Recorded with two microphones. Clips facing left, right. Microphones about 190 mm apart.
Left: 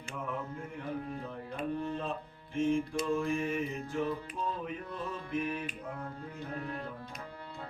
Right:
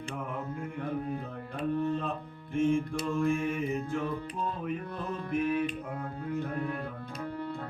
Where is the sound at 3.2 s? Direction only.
55° right (ahead or behind).